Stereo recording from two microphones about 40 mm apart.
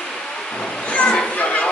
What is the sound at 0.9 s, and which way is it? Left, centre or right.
Children playing, left.